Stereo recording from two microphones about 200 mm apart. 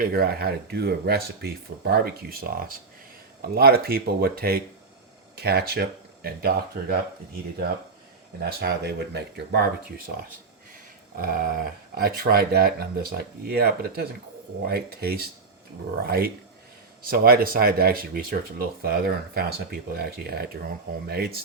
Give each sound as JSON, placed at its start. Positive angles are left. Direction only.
{"t": 0.0, "sound": "speech", "side_deg": -50}
{"t": 8.4, "sound": "speech", "side_deg": -55}
{"t": 11.2, "sound": "speech", "side_deg": -45}